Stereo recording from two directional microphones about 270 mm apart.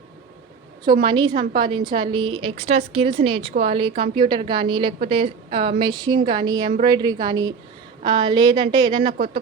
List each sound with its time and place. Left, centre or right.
1.0 s a woman's voice: centre